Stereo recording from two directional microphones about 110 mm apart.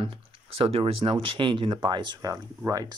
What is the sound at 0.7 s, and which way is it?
Speech, 60° right (ahead or behind).